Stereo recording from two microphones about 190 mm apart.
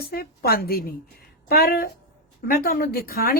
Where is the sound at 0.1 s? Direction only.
55° left (ahead or behind).